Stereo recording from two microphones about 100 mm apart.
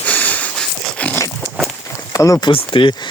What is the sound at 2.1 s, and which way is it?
Speech, 35° left (ahead or behind).